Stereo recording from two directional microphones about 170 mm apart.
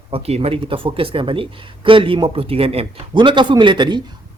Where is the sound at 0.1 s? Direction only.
35° right (ahead or behind).